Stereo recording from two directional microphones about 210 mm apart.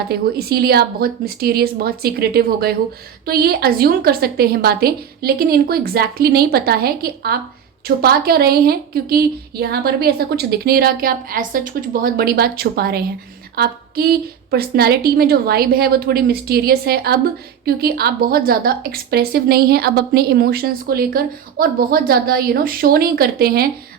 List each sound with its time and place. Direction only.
0.1 s a woman's voice: 50° right (ahead or behind)